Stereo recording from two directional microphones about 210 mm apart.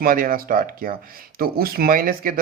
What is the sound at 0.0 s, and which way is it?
Speech, 40° right (ahead or behind).